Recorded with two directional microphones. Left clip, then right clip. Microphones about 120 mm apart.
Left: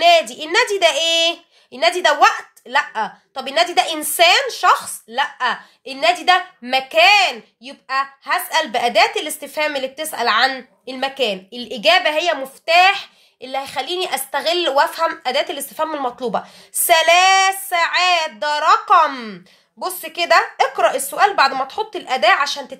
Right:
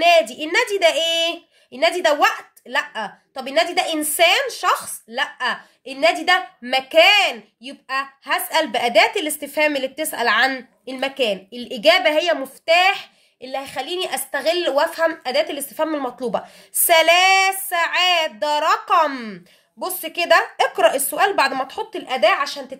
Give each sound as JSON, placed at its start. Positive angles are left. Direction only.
{"t": 0.0, "sound": "a child's voice", "side_deg": -30}
{"t": 5.9, "sound": "a woman's voice", "side_deg": -40}
{"t": 22.0, "sound": "a child's voice", "side_deg": -15}